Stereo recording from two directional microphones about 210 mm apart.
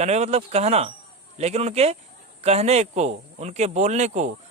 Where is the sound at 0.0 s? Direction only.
30° right (ahead or behind).